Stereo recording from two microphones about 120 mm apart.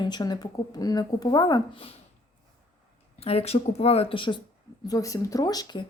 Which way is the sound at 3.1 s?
55° left (ahead or behind).